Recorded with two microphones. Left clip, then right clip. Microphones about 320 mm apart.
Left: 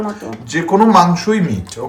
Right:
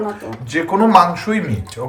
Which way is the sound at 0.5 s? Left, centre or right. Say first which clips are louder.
Left 1 dB; centre.